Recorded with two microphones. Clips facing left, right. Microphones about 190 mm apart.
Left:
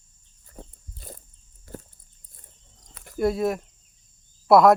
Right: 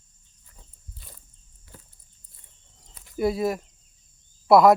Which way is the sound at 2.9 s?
65° left (ahead or behind).